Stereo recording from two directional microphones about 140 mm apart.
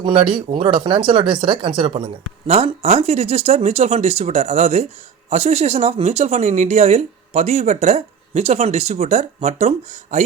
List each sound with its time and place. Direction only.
0.0 s speech: 35° right (ahead or behind); by 10.2 s 55° right (ahead or behind)